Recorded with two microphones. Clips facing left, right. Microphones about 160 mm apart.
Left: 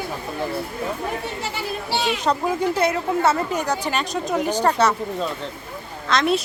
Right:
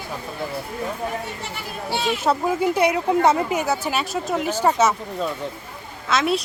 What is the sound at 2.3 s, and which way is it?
Speech, 10° right (ahead or behind).